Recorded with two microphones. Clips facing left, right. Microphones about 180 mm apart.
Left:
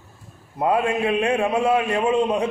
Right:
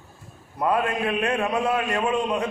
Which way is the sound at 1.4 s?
30° left (ahead or behind).